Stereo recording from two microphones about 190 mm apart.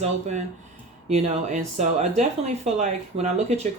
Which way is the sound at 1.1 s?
40° right (ahead or behind).